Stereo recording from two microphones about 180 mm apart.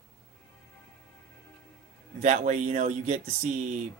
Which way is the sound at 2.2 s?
40° right (ahead or behind).